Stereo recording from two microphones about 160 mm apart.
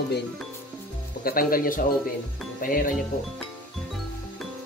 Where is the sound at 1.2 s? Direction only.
65° left (ahead or behind).